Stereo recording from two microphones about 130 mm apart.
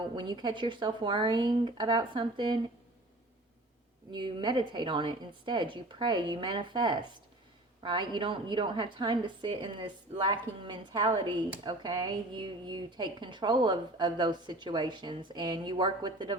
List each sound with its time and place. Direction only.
0.0 s a woman's voice: 35° right (ahead or behind)
4.1 s a woman's voice: 35° right (ahead or behind)